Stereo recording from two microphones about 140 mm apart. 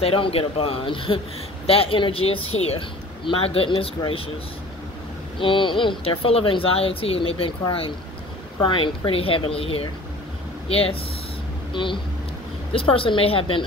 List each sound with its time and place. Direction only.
0.0 s speech: 45° left (ahead or behind)
5.4 s a woman's voice: 35° left (ahead or behind)